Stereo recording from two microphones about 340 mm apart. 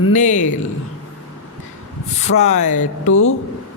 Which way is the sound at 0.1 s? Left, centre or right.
Left.